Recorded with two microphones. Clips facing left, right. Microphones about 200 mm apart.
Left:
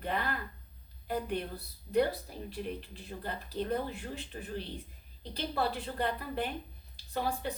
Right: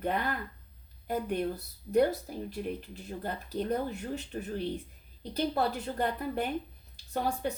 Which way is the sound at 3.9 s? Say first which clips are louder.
Right 5 dB; 45° right (ahead or behind).